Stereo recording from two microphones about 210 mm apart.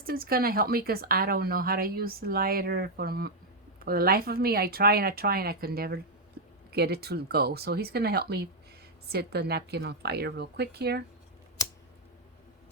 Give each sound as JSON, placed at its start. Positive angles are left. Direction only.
{"t": 0.0, "sound": "speech", "side_deg": -45}